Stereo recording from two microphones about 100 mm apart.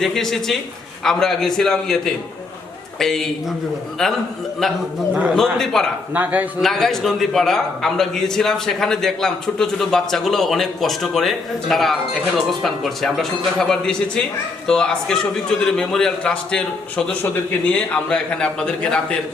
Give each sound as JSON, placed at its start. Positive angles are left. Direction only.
{"t": 0.0, "sound": "a man's voice", "side_deg": 5}
{"t": 5.1, "sound": "a man's voice", "side_deg": -10}
{"t": 5.4, "sound": "a man's voice", "side_deg": 5}
{"t": 6.1, "sound": "a man's voice", "side_deg": -15}
{"t": 6.6, "sound": "a man's voice", "side_deg": 5}